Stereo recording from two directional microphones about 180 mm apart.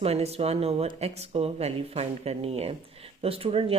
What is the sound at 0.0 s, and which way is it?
A woman's voice, 35° right (ahead or behind).